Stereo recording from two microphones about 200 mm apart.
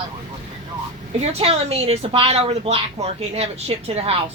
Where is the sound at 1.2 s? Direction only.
30° right (ahead or behind).